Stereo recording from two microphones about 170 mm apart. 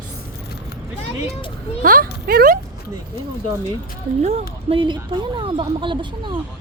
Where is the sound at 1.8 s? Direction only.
55° right (ahead or behind).